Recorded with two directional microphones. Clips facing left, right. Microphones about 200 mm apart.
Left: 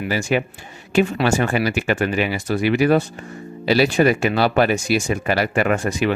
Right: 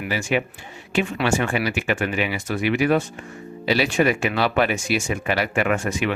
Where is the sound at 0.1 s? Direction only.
40° left (ahead or behind).